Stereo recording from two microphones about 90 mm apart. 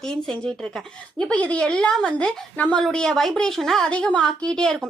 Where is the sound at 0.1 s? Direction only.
10° left (ahead or behind).